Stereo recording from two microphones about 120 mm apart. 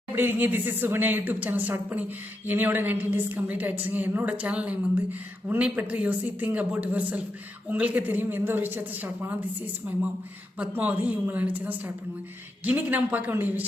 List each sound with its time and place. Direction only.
0.2 s a woman's voice: 15° right (ahead or behind)
10.6 s a woman's voice: 15° right (ahead or behind)